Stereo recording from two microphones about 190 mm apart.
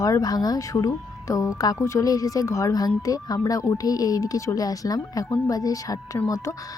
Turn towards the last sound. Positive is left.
turn(degrees=20)  # may be behind; listen again after turning